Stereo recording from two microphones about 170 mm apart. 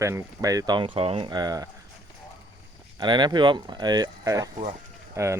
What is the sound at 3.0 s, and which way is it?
Speech, 25° right (ahead or behind).